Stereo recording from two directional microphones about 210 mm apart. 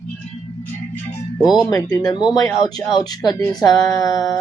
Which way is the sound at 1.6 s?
20° left (ahead or behind).